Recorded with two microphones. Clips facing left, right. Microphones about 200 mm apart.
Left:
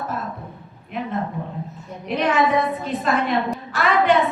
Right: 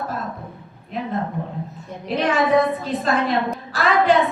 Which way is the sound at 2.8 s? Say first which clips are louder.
Right 1 dB; 35° right (ahead or behind).